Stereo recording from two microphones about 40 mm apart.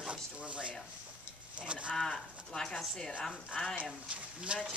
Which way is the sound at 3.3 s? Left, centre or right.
Left.